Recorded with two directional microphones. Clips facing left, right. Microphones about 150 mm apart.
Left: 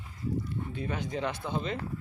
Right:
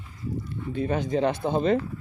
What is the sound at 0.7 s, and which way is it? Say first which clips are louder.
Speech: right 11 dB; 30° right (ahead or behind).